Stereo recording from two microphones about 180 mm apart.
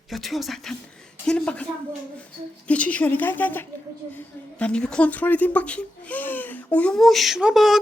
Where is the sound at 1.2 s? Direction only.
5° left (ahead or behind).